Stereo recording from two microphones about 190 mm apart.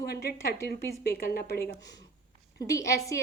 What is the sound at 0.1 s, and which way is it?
A woman's voice, 55° left (ahead or behind).